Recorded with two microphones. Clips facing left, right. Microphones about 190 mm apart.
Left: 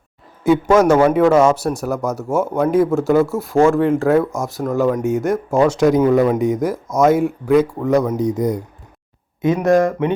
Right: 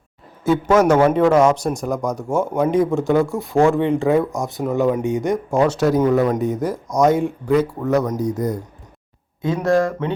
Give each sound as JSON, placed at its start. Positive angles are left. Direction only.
{"t": 0.4, "sound": "a man's voice", "side_deg": 10}
{"t": 5.0, "sound": "a man's voice", "side_deg": 5}